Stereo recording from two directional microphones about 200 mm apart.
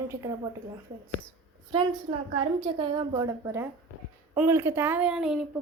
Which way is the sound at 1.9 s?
35° right (ahead or behind).